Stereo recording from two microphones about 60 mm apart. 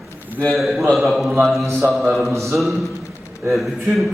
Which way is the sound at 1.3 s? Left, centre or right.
Centre.